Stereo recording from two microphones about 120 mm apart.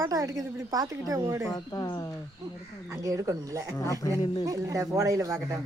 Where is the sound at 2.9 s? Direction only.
25° right (ahead or behind).